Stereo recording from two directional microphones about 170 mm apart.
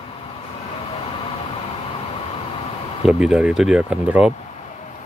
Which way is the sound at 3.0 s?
5° right (ahead or behind).